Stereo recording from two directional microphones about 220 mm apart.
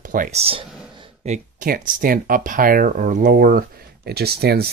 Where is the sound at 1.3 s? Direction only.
40° right (ahead or behind).